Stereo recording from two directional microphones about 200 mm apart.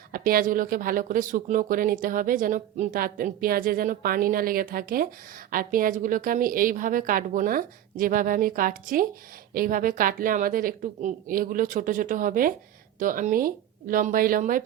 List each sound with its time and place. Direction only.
0.1 s speech: 45° right (ahead or behind)